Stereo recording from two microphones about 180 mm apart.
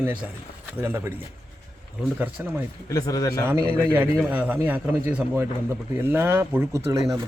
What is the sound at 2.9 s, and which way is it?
Speech, 20° left (ahead or behind).